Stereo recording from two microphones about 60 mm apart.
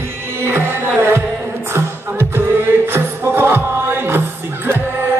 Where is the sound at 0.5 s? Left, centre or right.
Right.